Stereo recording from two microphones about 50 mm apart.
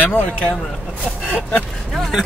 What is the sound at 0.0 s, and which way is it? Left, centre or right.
Speech, left.